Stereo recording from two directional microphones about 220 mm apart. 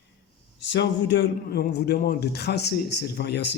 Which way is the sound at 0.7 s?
50° left (ahead or behind).